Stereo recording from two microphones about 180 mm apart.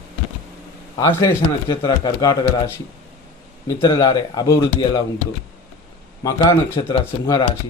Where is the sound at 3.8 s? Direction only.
20° left (ahead or behind).